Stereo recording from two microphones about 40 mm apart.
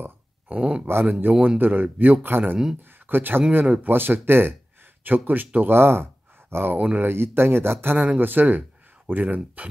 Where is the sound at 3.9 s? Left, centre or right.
Right.